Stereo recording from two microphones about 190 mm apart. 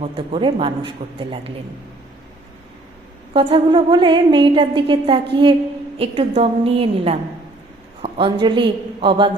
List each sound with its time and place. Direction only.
0.0 s a woman's voice: 30° right (ahead or behind)
3.3 s a woman's voice: 25° right (ahead or behind)